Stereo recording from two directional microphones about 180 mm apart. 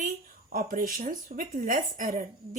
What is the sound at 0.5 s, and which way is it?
Speech, 50° right (ahead or behind).